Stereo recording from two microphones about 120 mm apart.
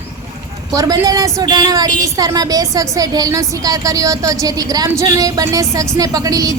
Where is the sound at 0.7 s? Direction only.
30° right (ahead or behind).